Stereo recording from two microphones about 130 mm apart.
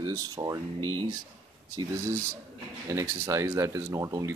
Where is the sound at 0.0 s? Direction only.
30° right (ahead or behind).